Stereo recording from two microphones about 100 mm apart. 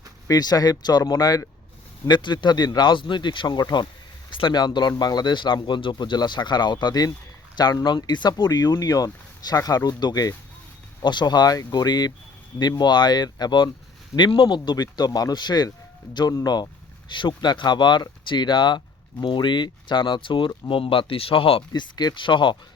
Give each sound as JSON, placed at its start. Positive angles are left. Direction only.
{"t": 0.3, "sound": "speech", "side_deg": 40}
{"t": 2.0, "sound": "speech", "side_deg": 50}
{"t": 21.7, "sound": "speech", "side_deg": 45}